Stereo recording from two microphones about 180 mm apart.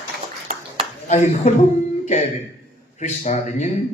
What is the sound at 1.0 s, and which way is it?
Speech, 40° left (ahead or behind).